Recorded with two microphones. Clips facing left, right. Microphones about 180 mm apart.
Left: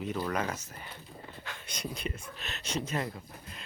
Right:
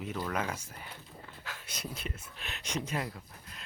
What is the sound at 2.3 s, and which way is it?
Speech, 10° right (ahead or behind).